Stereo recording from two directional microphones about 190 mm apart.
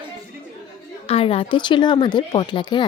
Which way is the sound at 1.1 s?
30° left (ahead or behind).